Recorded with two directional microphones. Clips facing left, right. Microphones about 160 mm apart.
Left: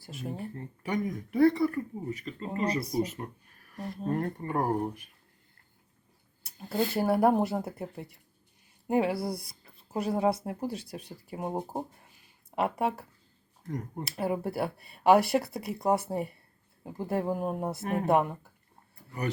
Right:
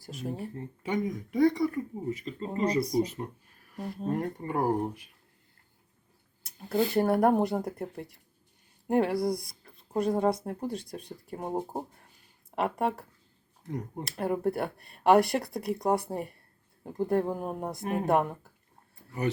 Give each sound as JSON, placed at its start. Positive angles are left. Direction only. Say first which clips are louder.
{"t": 0.0, "sound": "speech", "louder": "right 2 dB", "side_deg": 0}
{"t": 0.5, "sound": "speech", "louder": "even", "side_deg": -25}
{"t": 2.6, "sound": "speech", "louder": "right 3 dB", "side_deg": 5}
{"t": 6.4, "sound": "speech", "louder": "right 2 dB", "side_deg": 0}